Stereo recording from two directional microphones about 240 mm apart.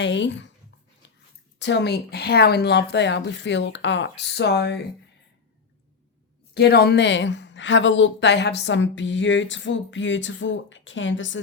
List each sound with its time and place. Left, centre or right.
0.0 s a woman's voice: left
1.5 s a woman's voice: left
6.5 s a woman's voice: left